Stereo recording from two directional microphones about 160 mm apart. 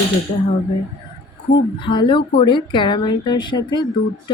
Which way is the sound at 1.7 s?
30° left (ahead or behind).